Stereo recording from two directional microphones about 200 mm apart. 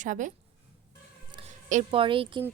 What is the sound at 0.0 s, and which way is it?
Speech, 40° right (ahead or behind).